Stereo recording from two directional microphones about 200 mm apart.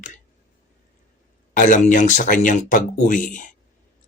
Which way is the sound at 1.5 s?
40° left (ahead or behind).